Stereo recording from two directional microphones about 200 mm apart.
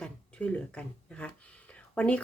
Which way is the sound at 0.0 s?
5° left (ahead or behind).